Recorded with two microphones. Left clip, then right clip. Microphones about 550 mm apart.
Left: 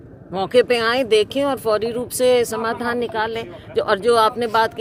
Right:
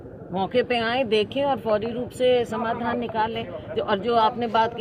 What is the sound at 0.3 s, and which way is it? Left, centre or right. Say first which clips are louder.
Speech: left 6 dB; left.